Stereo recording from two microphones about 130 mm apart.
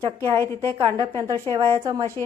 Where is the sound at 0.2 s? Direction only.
20° left (ahead or behind).